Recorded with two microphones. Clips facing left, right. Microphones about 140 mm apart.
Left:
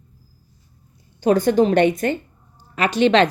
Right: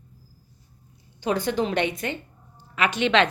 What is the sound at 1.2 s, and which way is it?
A woman's voice, 45° left (ahead or behind).